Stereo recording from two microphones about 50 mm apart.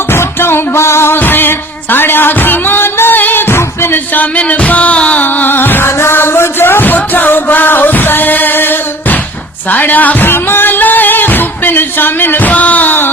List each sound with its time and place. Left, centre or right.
0.1 s music: left
1.2 s music: left
5.2 s music: left
5.9 s music: left
9.6 s speech: left
10.2 s music: left